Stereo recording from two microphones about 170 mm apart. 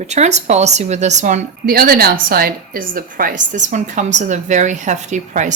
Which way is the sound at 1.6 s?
60° right (ahead or behind).